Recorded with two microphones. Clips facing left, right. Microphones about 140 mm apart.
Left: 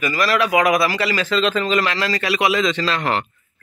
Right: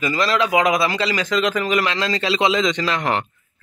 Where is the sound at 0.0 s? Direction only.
20° right (ahead or behind).